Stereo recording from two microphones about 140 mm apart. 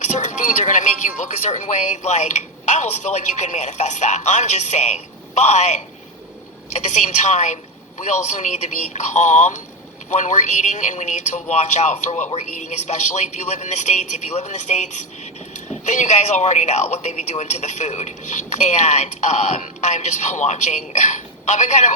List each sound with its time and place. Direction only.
0.0 s a man's voice: 60° left (ahead or behind)